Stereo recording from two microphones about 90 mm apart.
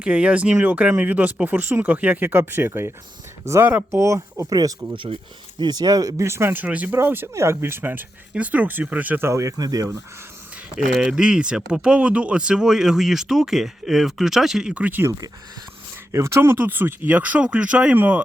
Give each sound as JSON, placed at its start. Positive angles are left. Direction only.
{"t": 0.0, "sound": "speech", "side_deg": -15}
{"t": 6.2, "sound": "speech", "side_deg": -30}
{"t": 9.3, "sound": "speech", "side_deg": -35}
{"t": 10.8, "sound": "speech", "side_deg": -10}
{"t": 16.1, "sound": "speech", "side_deg": -30}